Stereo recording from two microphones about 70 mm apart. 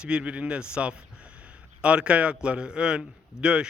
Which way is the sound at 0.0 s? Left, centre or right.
Centre.